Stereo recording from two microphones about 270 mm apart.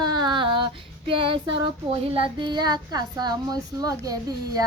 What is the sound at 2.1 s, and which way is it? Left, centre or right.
Speech, centre.